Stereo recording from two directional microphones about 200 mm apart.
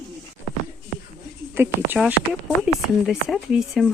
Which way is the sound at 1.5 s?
10° right (ahead or behind).